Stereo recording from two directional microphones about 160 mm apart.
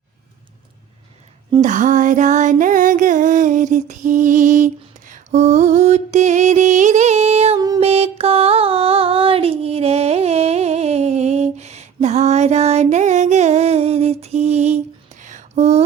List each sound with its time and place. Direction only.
1.6 s music: 50° right (ahead or behind)